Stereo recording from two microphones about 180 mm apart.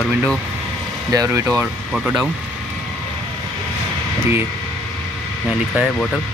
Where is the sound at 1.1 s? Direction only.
15° right (ahead or behind).